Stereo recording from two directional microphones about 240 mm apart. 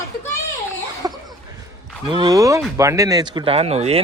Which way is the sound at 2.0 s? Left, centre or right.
Centre.